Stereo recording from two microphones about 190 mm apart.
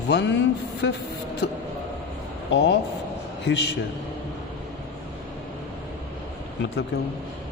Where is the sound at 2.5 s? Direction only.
65° left (ahead or behind).